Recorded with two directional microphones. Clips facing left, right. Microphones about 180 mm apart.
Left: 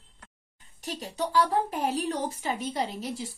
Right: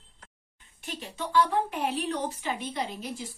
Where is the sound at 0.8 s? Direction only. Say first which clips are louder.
Left 4 dB; 40° left (ahead or behind).